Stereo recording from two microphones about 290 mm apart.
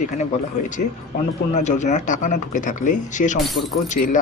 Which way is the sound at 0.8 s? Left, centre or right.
Left.